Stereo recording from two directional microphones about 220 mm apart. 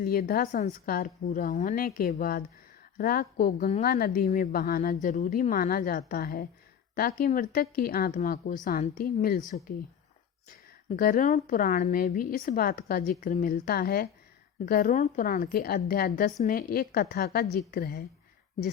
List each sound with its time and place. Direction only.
0.0 s a woman's voice: 45° left (ahead or behind)
10.8 s a woman's voice: 40° left (ahead or behind)